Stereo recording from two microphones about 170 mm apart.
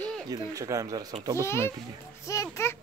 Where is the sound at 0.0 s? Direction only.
5° left (ahead or behind).